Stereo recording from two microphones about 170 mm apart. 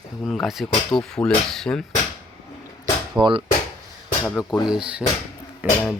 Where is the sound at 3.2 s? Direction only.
30° right (ahead or behind).